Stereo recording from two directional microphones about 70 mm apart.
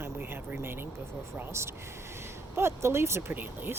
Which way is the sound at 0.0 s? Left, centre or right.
Right.